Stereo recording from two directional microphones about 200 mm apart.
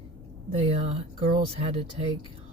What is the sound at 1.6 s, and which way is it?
Speech, 35° right (ahead or behind).